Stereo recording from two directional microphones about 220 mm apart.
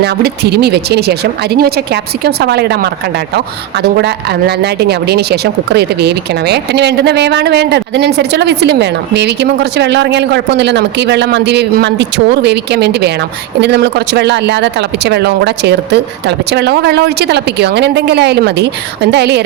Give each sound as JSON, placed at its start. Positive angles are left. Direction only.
{"t": 0.0, "sound": "speech", "side_deg": -50}